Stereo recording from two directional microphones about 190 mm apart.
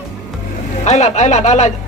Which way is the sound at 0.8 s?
35° left (ahead or behind).